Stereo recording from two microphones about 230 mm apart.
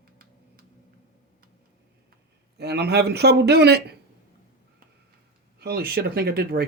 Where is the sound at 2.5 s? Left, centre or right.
Right.